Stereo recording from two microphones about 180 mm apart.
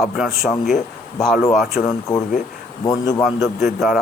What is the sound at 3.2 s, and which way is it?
Speech, centre (ahead or behind).